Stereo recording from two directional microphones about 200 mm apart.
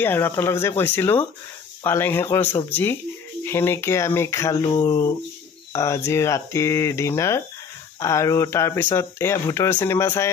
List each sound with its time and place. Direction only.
0.0 s speech: 10° left (ahead or behind)